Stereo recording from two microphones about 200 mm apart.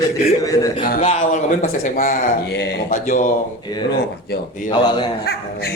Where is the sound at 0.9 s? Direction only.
40° left (ahead or behind).